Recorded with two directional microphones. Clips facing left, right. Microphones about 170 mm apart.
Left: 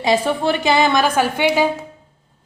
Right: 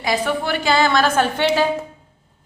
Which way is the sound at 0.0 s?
25° left (ahead or behind).